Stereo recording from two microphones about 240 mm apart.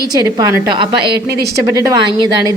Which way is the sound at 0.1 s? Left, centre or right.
Centre.